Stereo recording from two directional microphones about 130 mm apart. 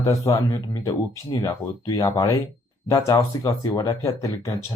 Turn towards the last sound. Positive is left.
turn(degrees=25)  # may be behind; listen again after turning